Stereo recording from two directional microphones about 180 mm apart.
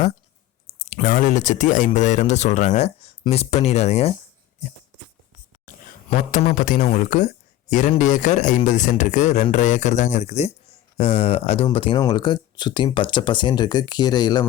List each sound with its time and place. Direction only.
1.0 s speech: 45° left (ahead or behind)
5.6 s a man's voice: 45° left (ahead or behind); by 14.4 s 20° left (ahead or behind)